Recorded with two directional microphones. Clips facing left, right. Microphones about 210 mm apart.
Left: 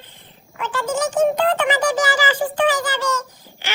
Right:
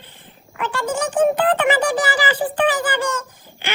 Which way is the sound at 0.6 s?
60° right (ahead or behind).